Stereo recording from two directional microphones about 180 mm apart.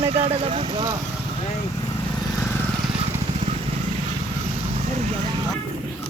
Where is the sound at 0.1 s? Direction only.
35° right (ahead or behind).